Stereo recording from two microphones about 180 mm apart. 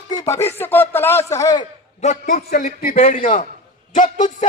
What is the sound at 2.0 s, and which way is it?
A man's voice, 45° left (ahead or behind).